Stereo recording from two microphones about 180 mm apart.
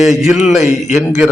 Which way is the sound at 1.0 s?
5° right (ahead or behind).